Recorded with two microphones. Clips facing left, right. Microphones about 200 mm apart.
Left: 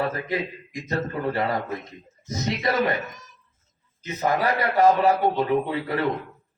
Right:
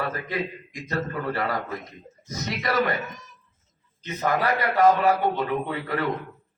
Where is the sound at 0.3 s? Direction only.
25° left (ahead or behind).